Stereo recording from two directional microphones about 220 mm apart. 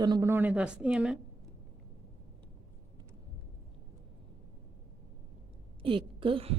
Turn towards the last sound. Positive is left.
turn(degrees=-25)  # may be behind; listen again after turning